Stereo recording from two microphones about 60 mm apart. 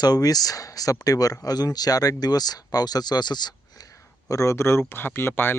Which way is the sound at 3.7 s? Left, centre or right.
Left.